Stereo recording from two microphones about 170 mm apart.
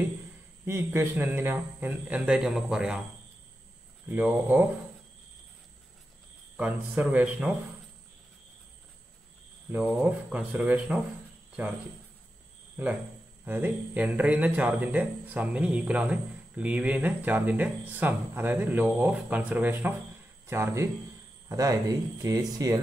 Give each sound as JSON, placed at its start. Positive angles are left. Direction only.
{"t": 0.7, "sound": "speech", "side_deg": -15}
{"t": 4.1, "sound": "speech", "side_deg": -10}
{"t": 6.5, "sound": "speech", "side_deg": -10}
{"t": 9.7, "sound": "speech", "side_deg": -10}
{"t": 13.5, "sound": "speech", "side_deg": -10}